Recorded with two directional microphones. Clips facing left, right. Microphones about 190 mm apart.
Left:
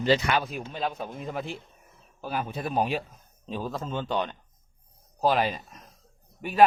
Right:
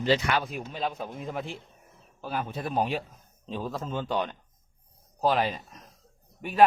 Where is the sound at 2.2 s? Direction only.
10° left (ahead or behind); by 4.3 s 5° right (ahead or behind).